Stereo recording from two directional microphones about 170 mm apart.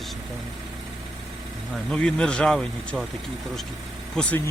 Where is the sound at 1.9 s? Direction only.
5° left (ahead or behind).